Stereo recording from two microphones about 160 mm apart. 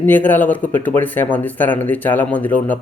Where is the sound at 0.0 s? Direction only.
10° left (ahead or behind).